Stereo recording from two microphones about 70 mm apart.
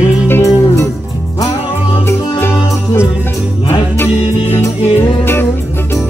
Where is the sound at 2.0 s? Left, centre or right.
Left.